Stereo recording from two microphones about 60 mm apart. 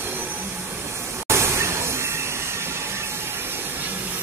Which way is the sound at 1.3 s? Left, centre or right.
Right.